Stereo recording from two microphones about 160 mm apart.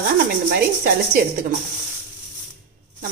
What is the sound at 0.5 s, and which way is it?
Speech, 90° right.